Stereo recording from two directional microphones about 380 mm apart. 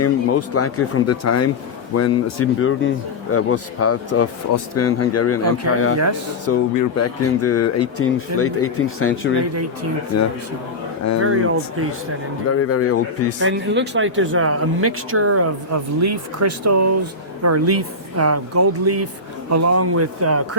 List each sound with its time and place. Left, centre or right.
0.0 s speech: left
11.2 s speech: right
12.5 s speech: left
13.4 s speech: right